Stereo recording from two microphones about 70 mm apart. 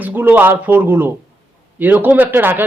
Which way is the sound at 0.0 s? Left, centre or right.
Right.